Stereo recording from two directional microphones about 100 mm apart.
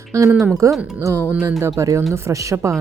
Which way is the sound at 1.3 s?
20° right (ahead or behind).